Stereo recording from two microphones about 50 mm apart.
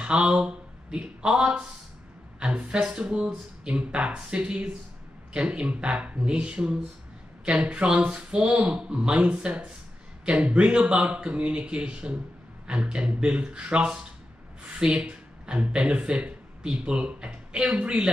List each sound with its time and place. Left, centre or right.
0.0 s speech: right